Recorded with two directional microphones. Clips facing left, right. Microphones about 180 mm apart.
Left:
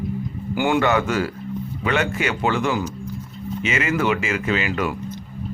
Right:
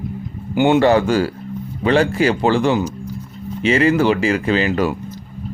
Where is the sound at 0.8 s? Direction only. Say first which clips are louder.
Right 6 dB; 30° right (ahead or behind).